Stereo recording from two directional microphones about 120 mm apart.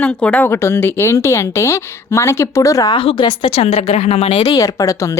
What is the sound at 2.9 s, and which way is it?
Speech, 45° left (ahead or behind).